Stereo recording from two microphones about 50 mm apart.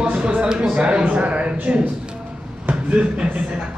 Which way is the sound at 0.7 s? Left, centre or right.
Right.